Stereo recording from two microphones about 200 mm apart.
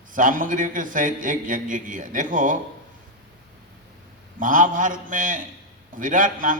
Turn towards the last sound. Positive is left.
turn(degrees=-40)  # may be behind; listen again after turning